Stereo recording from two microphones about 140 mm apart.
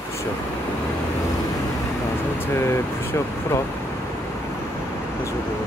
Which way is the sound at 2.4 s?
20° left (ahead or behind).